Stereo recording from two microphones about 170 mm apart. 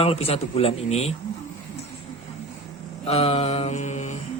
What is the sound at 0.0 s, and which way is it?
Speech, 35° left (ahead or behind).